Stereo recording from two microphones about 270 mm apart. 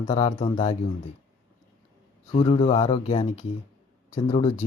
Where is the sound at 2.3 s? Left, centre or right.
Centre.